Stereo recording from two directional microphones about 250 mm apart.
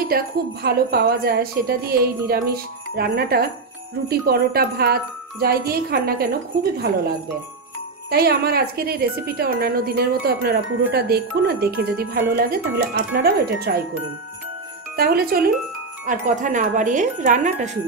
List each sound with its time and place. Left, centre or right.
0.1 s speech: right
8.1 s speech: right
15.0 s speech: right